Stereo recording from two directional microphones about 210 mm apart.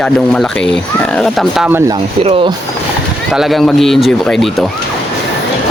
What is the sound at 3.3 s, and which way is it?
Speech, centre (ahead or behind).